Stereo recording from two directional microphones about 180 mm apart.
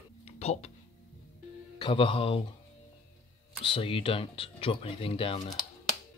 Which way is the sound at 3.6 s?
30° left (ahead or behind).